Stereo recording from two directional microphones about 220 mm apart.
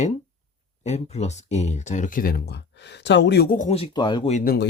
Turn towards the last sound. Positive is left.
turn(degrees=45)  # may be behind; listen again after turning